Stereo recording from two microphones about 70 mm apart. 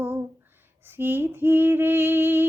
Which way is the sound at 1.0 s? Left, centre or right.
Right.